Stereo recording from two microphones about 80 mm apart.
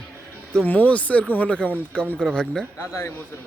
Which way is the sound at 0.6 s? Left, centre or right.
Centre.